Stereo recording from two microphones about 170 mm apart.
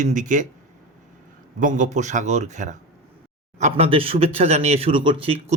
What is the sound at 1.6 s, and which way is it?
Speech, 50° right (ahead or behind).